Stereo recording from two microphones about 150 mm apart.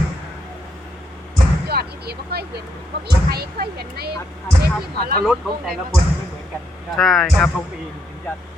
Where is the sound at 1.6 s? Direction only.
90° right.